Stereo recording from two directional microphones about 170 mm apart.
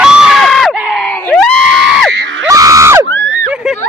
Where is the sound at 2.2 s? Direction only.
90° right.